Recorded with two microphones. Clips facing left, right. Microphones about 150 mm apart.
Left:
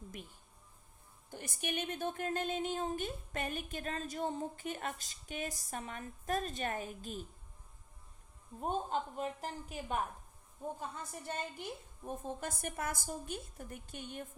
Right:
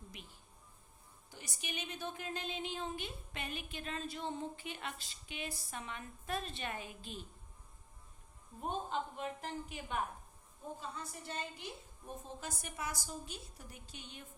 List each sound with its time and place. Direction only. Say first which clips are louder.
1.3 s speech: left 7 dB; 55° left (ahead or behind)
8.6 s a woman's voice: left 3 dB; 40° left (ahead or behind)
10.8 s speech: left 2 dB; 50° left (ahead or behind)